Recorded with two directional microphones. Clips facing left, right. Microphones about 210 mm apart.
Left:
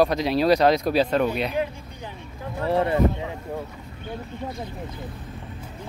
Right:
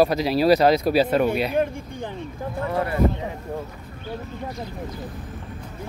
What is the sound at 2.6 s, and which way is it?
Speech, 30° left (ahead or behind).